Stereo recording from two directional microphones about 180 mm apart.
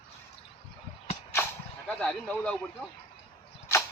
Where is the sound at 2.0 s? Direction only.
5° left (ahead or behind).